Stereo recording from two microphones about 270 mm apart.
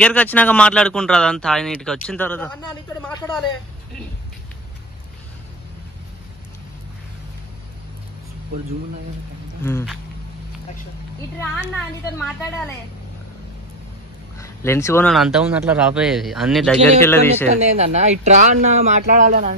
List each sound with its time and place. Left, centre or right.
0.0 s speech: centre
9.6 s a woman's voice: centre
11.3 s a woman's voice: centre
14.4 s a woman's voice: centre
17.5 s speech: right